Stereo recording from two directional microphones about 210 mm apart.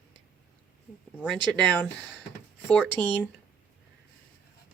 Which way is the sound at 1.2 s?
5° left (ahead or behind).